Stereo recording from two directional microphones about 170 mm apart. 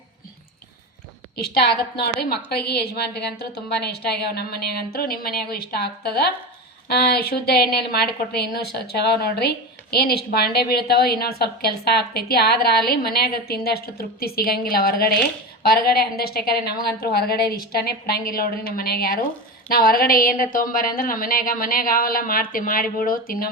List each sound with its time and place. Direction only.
1.5 s a woman's voice: 65° left (ahead or behind)